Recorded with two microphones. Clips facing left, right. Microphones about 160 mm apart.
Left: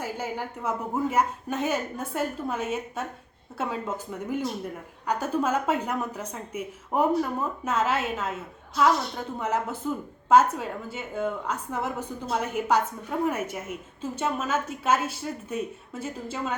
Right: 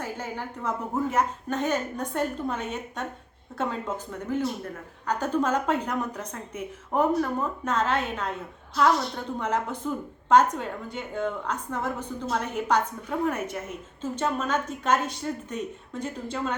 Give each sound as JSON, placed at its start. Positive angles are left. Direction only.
{"t": 0.0, "sound": "speech", "side_deg": 10}